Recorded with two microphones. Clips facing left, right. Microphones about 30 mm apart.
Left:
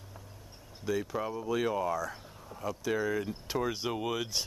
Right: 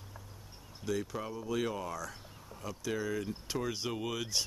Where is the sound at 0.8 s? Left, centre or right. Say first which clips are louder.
Left 4 dB; centre.